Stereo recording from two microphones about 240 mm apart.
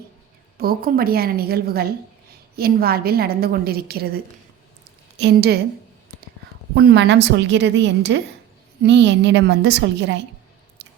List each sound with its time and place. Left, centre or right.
0.5 s a woman's voice: right
6.7 s a woman's voice: right